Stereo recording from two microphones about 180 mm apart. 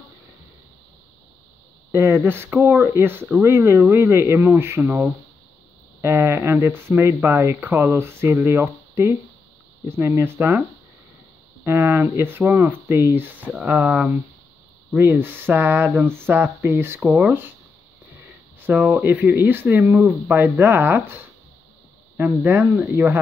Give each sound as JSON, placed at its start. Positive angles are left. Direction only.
{"t": 1.9, "sound": "speech", "side_deg": -15}
{"t": 11.6, "sound": "speech", "side_deg": -15}
{"t": 18.6, "sound": "speech", "side_deg": -10}
{"t": 22.1, "sound": "speech", "side_deg": -10}